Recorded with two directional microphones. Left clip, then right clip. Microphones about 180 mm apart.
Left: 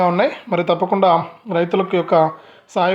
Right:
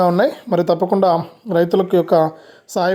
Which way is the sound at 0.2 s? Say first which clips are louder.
Right 1 dB; 5° right (ahead or behind).